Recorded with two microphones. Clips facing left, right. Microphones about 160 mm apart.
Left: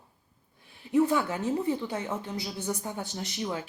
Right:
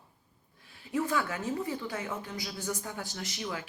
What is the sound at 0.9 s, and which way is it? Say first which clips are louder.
Speech: left 6 dB; 25° left (ahead or behind).